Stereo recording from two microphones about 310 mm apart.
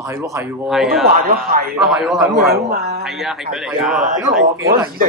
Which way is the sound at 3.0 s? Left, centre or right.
Centre.